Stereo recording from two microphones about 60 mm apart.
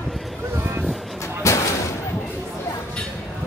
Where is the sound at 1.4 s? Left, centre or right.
Left.